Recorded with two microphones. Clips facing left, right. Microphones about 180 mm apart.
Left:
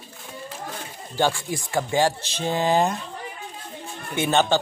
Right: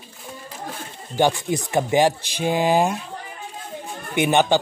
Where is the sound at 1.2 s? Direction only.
20° right (ahead or behind).